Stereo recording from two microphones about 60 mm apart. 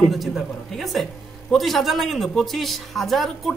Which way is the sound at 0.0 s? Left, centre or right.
Centre.